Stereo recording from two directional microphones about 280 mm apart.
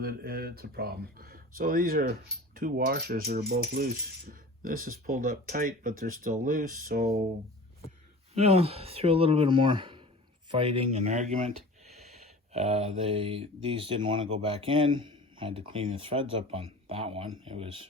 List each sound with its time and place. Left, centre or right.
0.0 s speech: right
8.3 s speech: right